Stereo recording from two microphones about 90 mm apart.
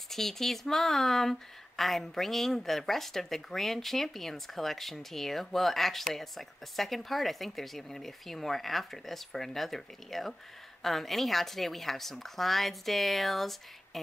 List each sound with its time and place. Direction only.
0.1 s speech: 5° left (ahead or behind)